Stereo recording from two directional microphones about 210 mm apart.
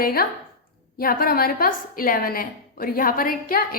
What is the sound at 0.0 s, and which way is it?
A woman's voice, 45° left (ahead or behind).